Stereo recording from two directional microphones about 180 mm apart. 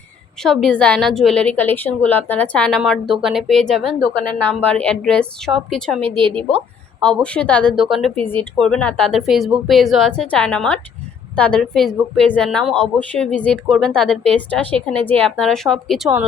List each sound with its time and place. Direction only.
0.4 s a woman's voice: centre (ahead or behind)
6.1 s a woman's voice: 30° right (ahead or behind)
7.0 s a woman's voice: 5° left (ahead or behind)